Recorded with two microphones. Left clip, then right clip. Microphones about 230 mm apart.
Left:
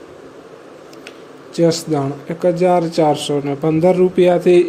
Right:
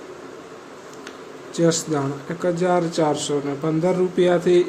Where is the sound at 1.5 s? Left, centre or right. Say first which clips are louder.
Left 5 dB; centre.